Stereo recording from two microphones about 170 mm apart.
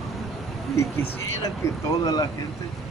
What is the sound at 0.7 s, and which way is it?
Speech, 15° left (ahead or behind).